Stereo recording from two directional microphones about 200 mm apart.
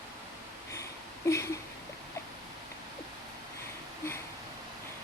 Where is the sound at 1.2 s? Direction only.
15° left (ahead or behind).